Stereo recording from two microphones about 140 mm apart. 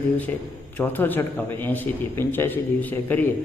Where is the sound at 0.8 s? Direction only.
15° left (ahead or behind).